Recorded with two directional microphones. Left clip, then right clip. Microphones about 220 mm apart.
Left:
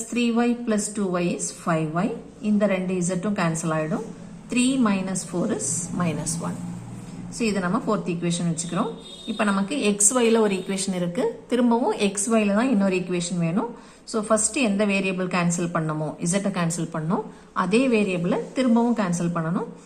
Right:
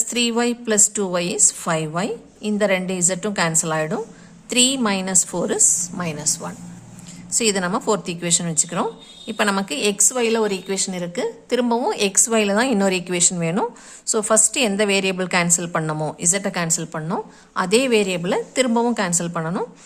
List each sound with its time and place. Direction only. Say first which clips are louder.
0.1 s speech: right 2 dB; 40° right (ahead or behind)
6.0 s a woman's voice: right 3 dB; 30° right (ahead or behind)
7.3 s speech: right 5 dB; 40° right (ahead or behind)